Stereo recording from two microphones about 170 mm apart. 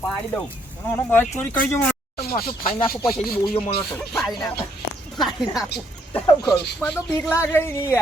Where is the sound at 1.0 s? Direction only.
10° left (ahead or behind).